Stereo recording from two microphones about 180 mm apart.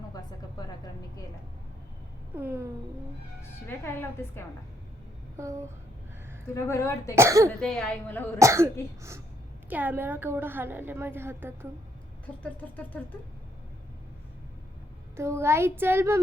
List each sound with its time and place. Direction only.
2.3 s a woman's voice: 10° right (ahead or behind)
3.7 s speech: 10° left (ahead or behind)
5.4 s a woman's voice: 15° right (ahead or behind)
6.5 s speech: 15° left (ahead or behind)
7.2 s a woman's voice: 15° right (ahead or behind)
7.6 s a woman's voice: 5° left (ahead or behind)
8.4 s a woman's voice: 15° right (ahead or behind)
12.2 s speech: 10° left (ahead or behind)
15.1 s a woman's voice: 15° right (ahead or behind)